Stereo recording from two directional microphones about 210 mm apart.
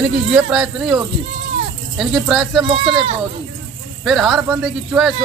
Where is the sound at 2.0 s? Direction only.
Centre (ahead or behind).